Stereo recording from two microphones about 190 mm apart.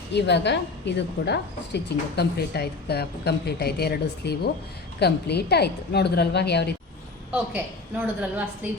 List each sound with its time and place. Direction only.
0.1 s a woman's voice: 65° left (ahead or behind)
7.3 s a woman's voice: 10° right (ahead or behind)